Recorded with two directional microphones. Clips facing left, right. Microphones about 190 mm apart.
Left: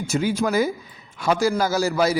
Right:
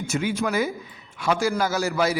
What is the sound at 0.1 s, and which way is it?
A man's voice, 35° left (ahead or behind).